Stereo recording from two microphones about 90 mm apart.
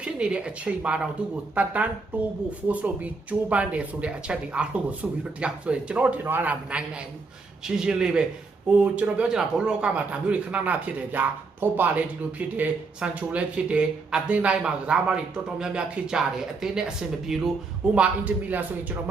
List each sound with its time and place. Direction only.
0.0 s speech: 10° right (ahead or behind)
17.9 s speech: 15° right (ahead or behind)